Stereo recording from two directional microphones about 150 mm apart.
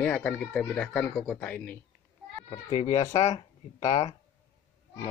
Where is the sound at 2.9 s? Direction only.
20° left (ahead or behind).